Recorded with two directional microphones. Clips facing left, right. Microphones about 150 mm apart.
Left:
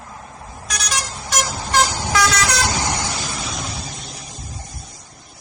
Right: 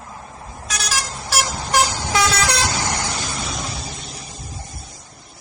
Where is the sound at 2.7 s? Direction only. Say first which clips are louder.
Left 1 dB; 15° left (ahead or behind).